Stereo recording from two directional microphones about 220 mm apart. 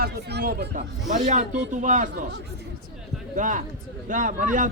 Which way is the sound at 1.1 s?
35° right (ahead or behind).